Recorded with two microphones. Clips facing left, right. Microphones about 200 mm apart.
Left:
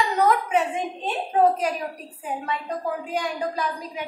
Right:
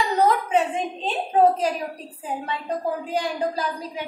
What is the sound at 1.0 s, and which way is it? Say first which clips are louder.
Speech: right 2 dB; 30° right (ahead or behind).